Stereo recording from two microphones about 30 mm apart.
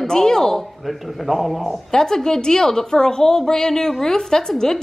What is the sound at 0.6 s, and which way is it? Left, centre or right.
Speech, centre.